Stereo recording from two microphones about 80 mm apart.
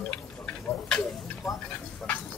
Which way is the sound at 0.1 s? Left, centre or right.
Centre.